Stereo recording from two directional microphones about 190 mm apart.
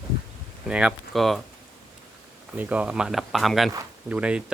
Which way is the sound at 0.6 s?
5° right (ahead or behind).